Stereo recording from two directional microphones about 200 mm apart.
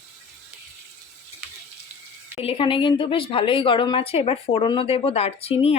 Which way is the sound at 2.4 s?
25° left (ahead or behind).